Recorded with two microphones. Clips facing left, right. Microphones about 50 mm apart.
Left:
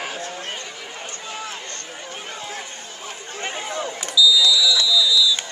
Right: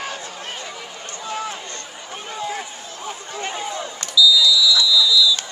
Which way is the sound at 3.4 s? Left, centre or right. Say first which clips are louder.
Left 1 dB; centre.